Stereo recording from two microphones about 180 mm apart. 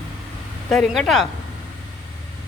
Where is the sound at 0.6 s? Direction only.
5° left (ahead or behind).